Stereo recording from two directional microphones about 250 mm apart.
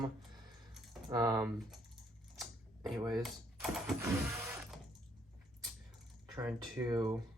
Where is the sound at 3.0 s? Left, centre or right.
Centre.